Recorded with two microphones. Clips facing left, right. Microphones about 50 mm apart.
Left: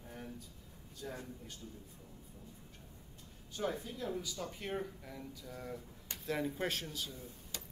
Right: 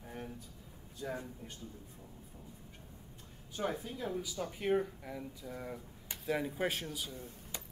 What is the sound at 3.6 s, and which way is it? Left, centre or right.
A man's voice, centre.